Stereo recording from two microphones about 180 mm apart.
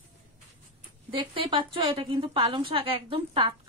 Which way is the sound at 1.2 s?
25° right (ahead or behind).